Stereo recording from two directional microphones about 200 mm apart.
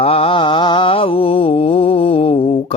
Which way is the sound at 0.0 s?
30° left (ahead or behind).